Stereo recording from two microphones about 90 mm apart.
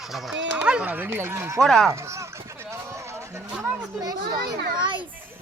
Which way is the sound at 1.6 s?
5° left (ahead or behind).